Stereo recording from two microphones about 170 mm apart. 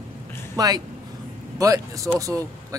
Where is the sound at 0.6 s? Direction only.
25° right (ahead or behind).